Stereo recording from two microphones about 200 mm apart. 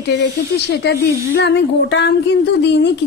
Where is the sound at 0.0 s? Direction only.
55° left (ahead or behind).